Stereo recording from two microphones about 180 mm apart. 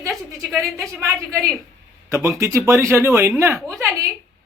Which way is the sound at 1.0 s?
15° right (ahead or behind).